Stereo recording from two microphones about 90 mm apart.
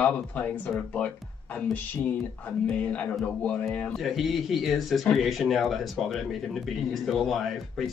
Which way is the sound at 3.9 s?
Centre (ahead or behind).